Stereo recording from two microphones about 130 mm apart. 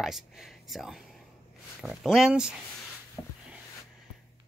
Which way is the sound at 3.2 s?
15° left (ahead or behind).